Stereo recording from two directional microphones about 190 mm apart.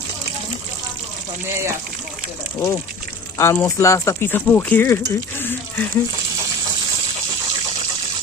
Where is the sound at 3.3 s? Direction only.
15° left (ahead or behind).